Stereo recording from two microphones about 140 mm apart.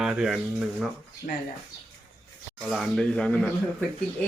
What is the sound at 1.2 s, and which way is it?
Speech, 65° left (ahead or behind).